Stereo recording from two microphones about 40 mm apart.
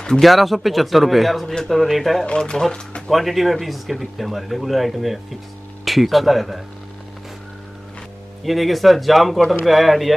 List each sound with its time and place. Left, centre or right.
0.2 s speech: centre
2.2 s speech: left
3.1 s speech: centre
8.5 s speech: centre